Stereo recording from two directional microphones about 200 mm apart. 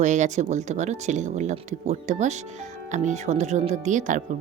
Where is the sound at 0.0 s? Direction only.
35° right (ahead or behind).